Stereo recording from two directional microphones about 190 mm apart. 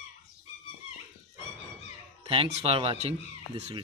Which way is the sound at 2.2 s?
30° right (ahead or behind).